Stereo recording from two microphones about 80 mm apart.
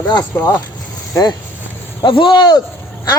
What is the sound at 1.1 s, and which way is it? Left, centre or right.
Speech, left.